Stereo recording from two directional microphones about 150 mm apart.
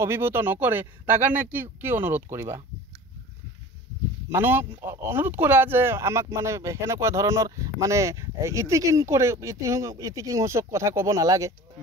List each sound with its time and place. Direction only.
0.0 s speech: 15° right (ahead or behind)
4.3 s speech: 15° right (ahead or behind)